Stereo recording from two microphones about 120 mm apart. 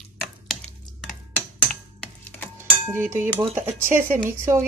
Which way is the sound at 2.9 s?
20° right (ahead or behind).